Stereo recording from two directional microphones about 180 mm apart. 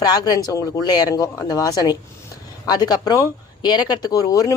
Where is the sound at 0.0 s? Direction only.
20° left (ahead or behind).